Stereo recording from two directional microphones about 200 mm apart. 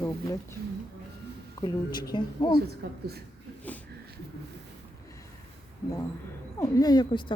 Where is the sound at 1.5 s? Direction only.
20° left (ahead or behind).